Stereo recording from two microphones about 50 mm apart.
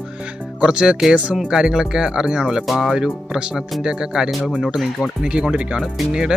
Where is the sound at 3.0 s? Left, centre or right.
Centre.